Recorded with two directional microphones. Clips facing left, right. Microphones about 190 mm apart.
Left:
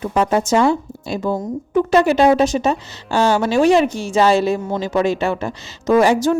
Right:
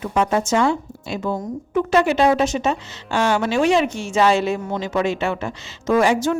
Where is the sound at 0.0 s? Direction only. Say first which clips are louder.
Left 2 dB; 35° left (ahead or behind).